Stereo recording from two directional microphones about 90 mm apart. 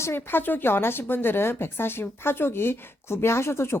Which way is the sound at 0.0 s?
25° left (ahead or behind).